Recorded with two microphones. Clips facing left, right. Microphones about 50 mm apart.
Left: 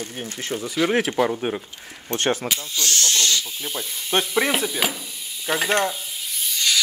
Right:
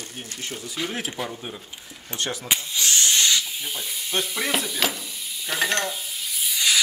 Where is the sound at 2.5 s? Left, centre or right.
Centre.